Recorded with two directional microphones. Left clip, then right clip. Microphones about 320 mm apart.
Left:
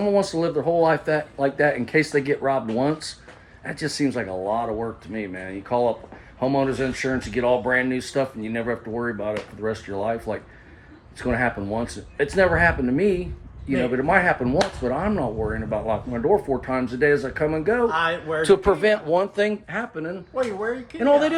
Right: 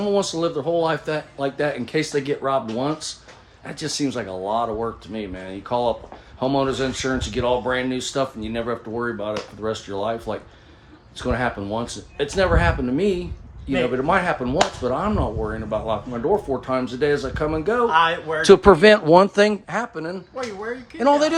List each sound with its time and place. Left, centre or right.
0.0 s speech: centre
17.8 s speech: right